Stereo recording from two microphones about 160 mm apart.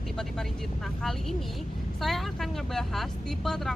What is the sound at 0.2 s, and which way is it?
Speech, 5° left (ahead or behind).